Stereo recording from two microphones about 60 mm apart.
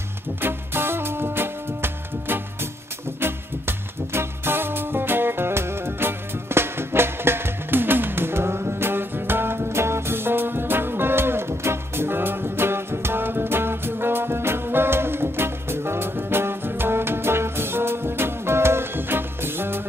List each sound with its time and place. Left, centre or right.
0.4 s music: right